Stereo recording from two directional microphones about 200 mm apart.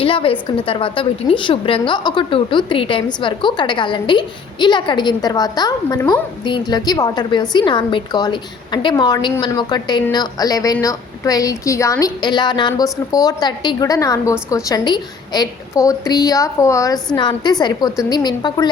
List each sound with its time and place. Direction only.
0.0 s a woman's voice: 25° left (ahead or behind)